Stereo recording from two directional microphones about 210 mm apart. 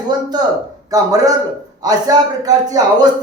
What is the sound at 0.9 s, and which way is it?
A man's voice, 15° right (ahead or behind).